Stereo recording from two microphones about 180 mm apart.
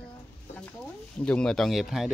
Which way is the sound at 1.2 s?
5° left (ahead or behind).